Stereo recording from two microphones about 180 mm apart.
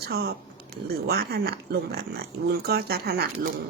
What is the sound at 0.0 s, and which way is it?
Speech, 60° right (ahead or behind).